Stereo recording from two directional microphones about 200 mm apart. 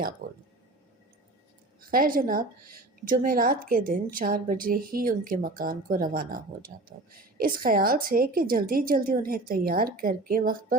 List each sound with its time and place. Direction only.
0.2 s a woman's voice: 45° right (ahead or behind)
1.8 s a woman's voice: 45° right (ahead or behind)